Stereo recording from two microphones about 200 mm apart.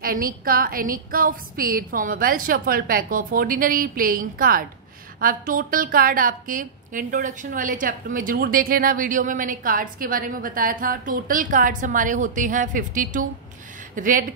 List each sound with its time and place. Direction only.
0.0 s a woman's voice: 45° right (ahead or behind)